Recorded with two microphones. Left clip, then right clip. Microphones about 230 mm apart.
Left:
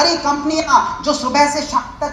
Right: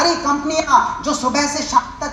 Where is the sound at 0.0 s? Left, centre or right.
Right.